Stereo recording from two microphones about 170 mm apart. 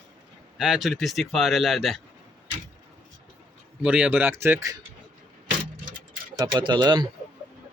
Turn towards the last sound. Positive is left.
turn(degrees=-25)  # may be behind; listen again after turning